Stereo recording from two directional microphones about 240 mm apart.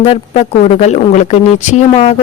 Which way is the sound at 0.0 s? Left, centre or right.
Left.